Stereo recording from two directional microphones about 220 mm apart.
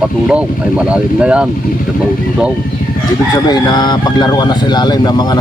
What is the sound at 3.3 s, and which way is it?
Speech, 20° left (ahead or behind).